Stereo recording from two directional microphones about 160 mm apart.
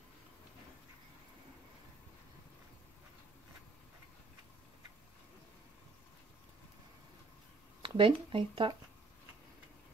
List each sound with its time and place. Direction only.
7.8 s speech: 30° right (ahead or behind)